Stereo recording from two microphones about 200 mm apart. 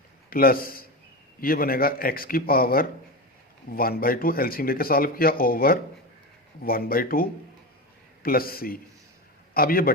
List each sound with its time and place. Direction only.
0.3 s a man's voice: 45° left (ahead or behind)